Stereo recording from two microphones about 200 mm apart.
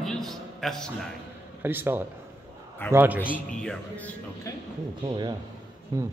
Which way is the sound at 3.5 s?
5° left (ahead or behind).